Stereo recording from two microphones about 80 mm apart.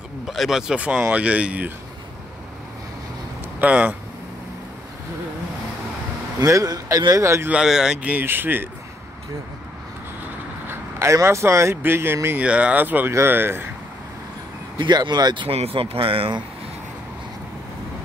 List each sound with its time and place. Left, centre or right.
0.3 s speech: centre
3.6 s speech: centre
6.4 s speech: right
7.6 s speech: centre
8.2 s speech: right
10.7 s vehicle: right
11.2 s speech: right
12.4 s speech: centre
14.8 s speech: right
16.0 s speech: right